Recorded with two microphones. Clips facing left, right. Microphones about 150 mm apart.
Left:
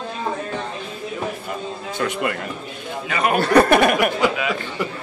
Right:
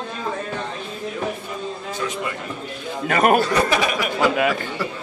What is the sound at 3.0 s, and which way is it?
Speech, 50° right (ahead or behind).